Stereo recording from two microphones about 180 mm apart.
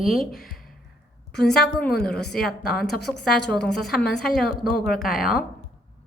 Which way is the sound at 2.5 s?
55° left (ahead or behind).